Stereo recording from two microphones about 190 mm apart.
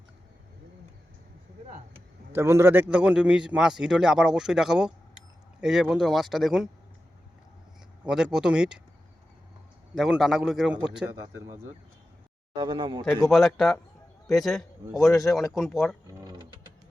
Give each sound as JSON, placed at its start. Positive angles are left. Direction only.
{"t": 2.3, "sound": "a man's voice", "side_deg": -15}
{"t": 8.0, "sound": "a man's voice", "side_deg": -5}
{"t": 9.9, "sound": "a man's voice", "side_deg": 0}
{"t": 12.5, "sound": "speech", "side_deg": -25}
{"t": 13.1, "sound": "a man's voice", "side_deg": 0}